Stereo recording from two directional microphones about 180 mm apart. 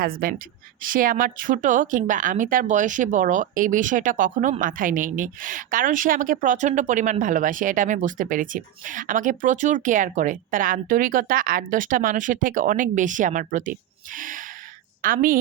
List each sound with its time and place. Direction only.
0.0 s a woman's voice: 55° right (ahead or behind)